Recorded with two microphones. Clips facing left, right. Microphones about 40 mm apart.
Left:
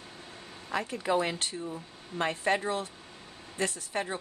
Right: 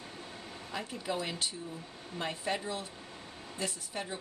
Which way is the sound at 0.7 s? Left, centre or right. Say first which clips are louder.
Left 7 dB; left.